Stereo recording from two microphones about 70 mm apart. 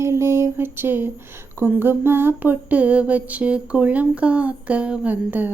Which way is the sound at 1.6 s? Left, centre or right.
Right.